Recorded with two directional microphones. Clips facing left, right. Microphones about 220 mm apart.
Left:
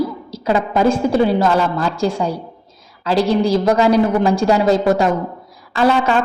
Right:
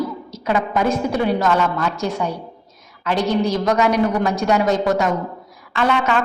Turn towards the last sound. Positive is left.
turn(degrees=30)  # may be behind; listen again after turning